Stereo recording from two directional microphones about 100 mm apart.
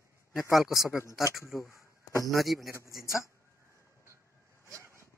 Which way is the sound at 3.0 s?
30° left (ahead or behind).